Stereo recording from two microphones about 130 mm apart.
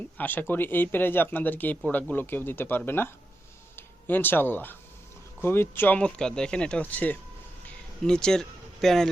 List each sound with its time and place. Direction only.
0.2 s speech: 15° left (ahead or behind)